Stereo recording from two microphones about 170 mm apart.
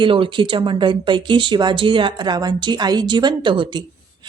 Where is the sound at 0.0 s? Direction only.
30° right (ahead or behind).